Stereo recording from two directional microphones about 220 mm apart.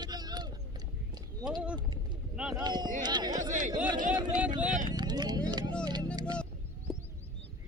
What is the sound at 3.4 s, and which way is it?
Chatter, 35° right (ahead or behind).